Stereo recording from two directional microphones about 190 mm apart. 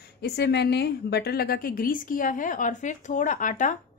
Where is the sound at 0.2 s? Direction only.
60° left (ahead or behind).